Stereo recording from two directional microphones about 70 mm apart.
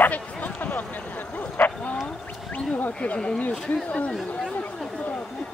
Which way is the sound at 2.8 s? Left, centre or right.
Centre.